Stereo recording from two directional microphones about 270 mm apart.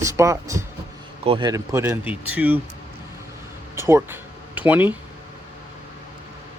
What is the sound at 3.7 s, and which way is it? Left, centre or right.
Speech, centre.